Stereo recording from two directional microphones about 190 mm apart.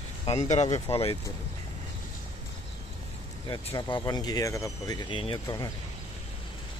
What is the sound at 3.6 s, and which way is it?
Speech, 25° left (ahead or behind).